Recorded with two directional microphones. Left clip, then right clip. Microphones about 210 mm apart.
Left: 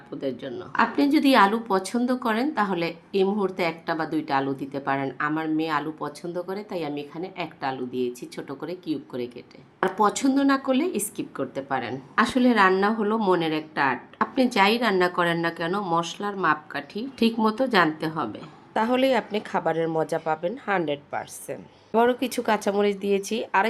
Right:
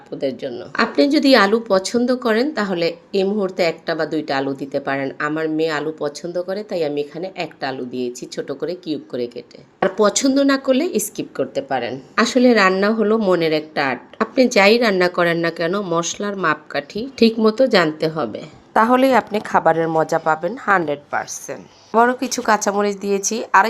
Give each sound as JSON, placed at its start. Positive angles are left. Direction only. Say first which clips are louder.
{"t": 0.2, "sound": "speech", "louder": "right 7 dB", "side_deg": -15}